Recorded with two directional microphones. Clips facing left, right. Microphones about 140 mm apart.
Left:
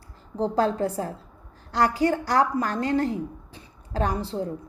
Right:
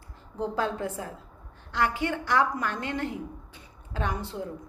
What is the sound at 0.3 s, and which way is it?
A woman's voice, 35° left (ahead or behind).